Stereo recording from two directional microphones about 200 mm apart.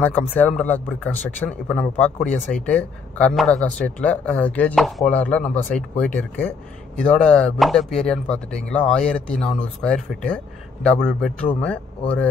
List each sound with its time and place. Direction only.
0.0 s speech: 10° left (ahead or behind)